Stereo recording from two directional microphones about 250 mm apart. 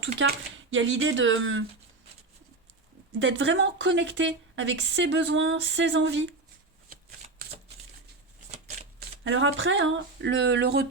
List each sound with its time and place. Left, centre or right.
0.2 s a woman's voice: right
3.2 s a woman's voice: right
9.0 s speech: right